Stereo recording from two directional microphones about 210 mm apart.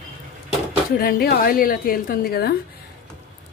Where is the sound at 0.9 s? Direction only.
45° left (ahead or behind).